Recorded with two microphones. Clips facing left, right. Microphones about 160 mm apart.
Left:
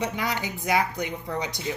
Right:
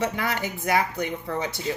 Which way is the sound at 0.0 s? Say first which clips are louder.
Right 2 dB; 15° left (ahead or behind).